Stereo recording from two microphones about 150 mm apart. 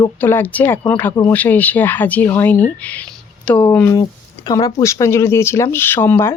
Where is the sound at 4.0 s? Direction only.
25° left (ahead or behind).